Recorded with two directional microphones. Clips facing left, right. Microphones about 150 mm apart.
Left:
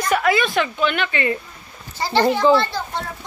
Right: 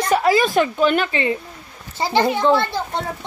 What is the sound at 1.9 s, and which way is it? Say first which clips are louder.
Speech: even; 20° right (ahead or behind).